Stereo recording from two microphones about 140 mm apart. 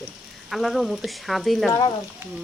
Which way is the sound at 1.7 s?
25° left (ahead or behind).